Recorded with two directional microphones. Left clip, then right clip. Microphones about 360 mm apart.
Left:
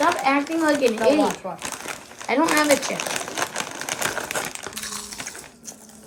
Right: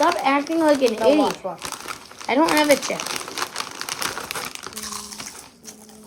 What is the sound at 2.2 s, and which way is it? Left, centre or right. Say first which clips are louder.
Speech: right 2 dB; right.